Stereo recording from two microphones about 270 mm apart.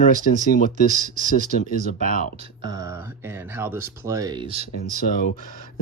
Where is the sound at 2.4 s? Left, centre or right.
Centre.